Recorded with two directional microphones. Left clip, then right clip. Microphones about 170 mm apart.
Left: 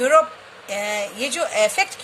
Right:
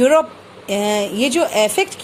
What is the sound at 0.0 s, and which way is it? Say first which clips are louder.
A woman's voice: right 2 dB; 30° right (ahead or behind).